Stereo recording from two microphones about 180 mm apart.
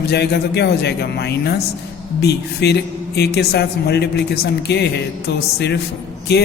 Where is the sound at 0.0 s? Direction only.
65° left (ahead or behind).